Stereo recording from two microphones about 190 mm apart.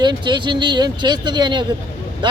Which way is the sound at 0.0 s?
25° right (ahead or behind).